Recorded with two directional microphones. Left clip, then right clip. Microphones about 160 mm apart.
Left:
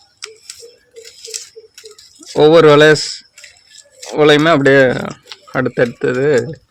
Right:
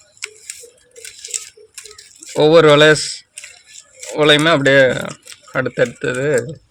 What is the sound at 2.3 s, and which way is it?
Speech, 90° left.